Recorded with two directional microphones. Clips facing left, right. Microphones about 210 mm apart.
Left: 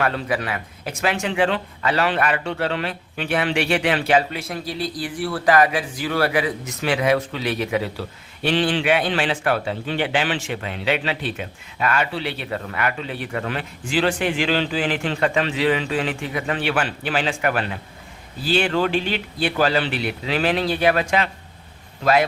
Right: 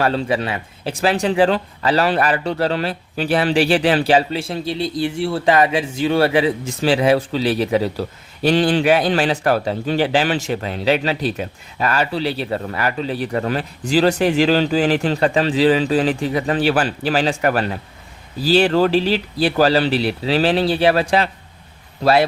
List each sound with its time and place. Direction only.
0.0 s speech: 30° right (ahead or behind)